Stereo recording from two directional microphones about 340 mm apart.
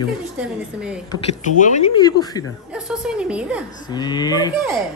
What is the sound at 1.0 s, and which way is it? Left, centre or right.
A man's voice, centre.